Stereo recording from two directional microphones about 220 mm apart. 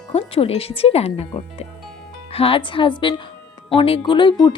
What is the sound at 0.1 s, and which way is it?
Music, 25° left (ahead or behind).